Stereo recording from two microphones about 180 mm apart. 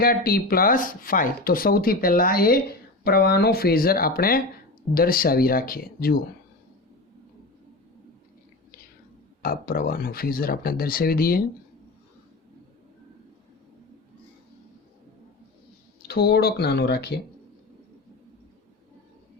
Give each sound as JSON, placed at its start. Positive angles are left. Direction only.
{"t": 0.0, "sound": "speech", "side_deg": 55}
{"t": 9.4, "sound": "speech", "side_deg": 55}
{"t": 16.0, "sound": "speech", "side_deg": 65}